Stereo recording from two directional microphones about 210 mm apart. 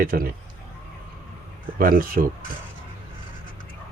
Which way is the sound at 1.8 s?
40° right (ahead or behind).